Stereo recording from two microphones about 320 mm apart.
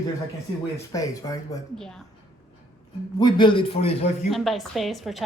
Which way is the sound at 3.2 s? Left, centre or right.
Centre.